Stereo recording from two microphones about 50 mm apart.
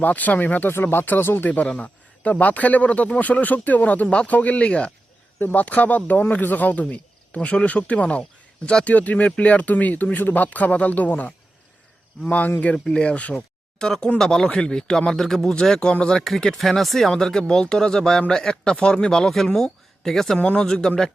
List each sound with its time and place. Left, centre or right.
0.0 s speech: left
0.7 s speech: left
1.5 s speech: left
1.7 s a sound: left
2.3 s speech: left
5.4 s speech: left
5.6 s speech: left
12.5 s speech: left
12.7 s speech: centre
16.6 s speech: centre